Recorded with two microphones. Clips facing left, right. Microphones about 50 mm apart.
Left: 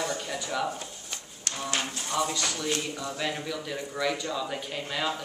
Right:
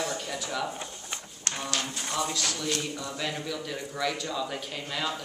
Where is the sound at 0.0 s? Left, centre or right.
Centre.